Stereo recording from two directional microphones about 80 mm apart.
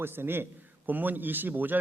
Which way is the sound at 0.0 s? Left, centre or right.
Right.